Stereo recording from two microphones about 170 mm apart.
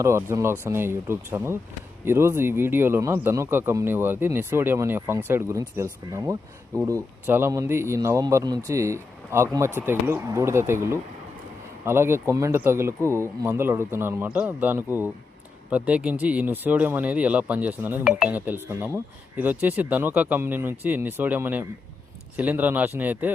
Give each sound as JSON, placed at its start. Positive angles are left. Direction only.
{"t": 0.0, "sound": "speech", "side_deg": -15}